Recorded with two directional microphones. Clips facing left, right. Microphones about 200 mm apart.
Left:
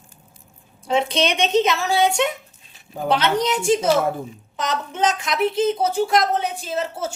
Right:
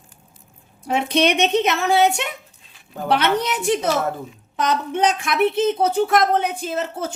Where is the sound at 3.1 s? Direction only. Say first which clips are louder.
Even; 60° right (ahead or behind).